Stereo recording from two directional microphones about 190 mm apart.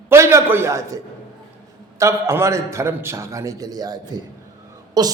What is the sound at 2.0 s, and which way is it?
A man's voice, 15° right (ahead or behind).